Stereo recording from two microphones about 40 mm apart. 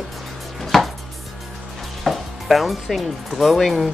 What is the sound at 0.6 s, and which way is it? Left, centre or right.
Chopping, centre.